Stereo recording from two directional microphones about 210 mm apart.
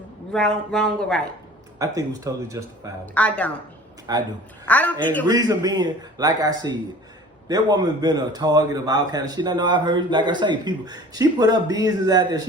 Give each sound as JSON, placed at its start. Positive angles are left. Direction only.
{"t": 0.3, "sound": "speech", "side_deg": 5}
{"t": 1.8, "sound": "speech", "side_deg": -15}
{"t": 3.2, "sound": "a woman's voice", "side_deg": 5}
{"t": 4.1, "sound": "speech", "side_deg": -15}
{"t": 4.6, "sound": "a woman's voice", "side_deg": 5}
{"t": 5.2, "sound": "a man's voice", "side_deg": -20}